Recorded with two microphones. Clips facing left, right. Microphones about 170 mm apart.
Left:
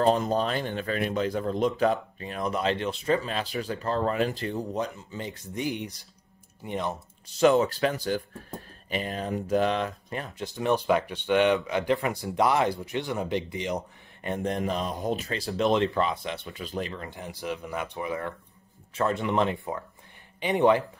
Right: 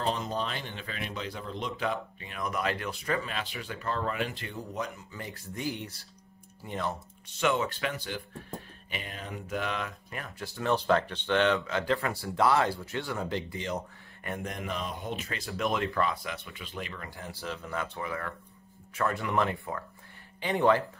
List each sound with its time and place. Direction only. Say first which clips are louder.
0.0 s speech: left 8 dB; 45° left (ahead or behind); by 7.0 s 20° left (ahead or behind)
7.3 s speech: left 8 dB; 35° left (ahead or behind); by 20.8 s 20° left (ahead or behind)